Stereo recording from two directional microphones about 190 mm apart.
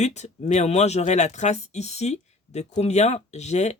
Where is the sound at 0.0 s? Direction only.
35° left (ahead or behind).